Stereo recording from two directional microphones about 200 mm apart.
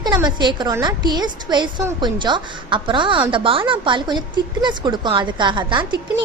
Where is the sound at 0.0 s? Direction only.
20° right (ahead or behind).